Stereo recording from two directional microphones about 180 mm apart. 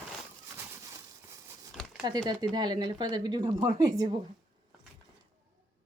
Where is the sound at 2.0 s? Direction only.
25° right (ahead or behind).